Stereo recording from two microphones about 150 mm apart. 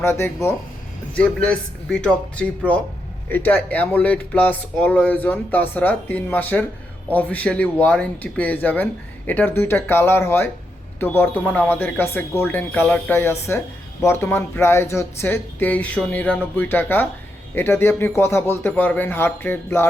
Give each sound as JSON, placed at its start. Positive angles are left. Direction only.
{"t": 0.0, "sound": "speech", "side_deg": 15}